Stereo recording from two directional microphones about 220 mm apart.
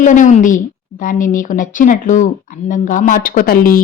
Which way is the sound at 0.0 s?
35° left (ahead or behind).